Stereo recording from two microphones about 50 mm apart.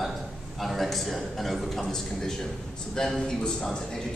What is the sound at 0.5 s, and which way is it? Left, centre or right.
A man's voice, centre.